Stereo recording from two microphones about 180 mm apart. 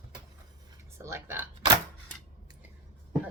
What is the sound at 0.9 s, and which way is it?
Speech, 15° right (ahead or behind).